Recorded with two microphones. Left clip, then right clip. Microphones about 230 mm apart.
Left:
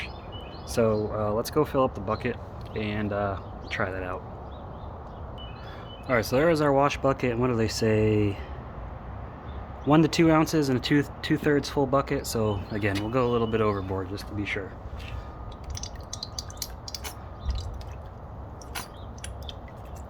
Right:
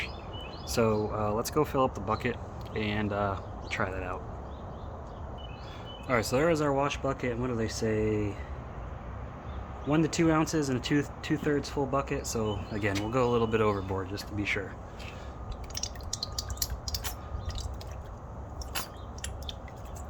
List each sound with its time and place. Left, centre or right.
0.7 s speech: centre
6.1 s speech: centre; by 8.4 s left
9.9 s speech: left; by 14.6 s centre
15.8 s a sound: centre